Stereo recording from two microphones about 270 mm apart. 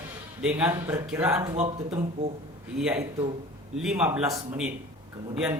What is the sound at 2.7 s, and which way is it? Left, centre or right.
A man's voice, centre.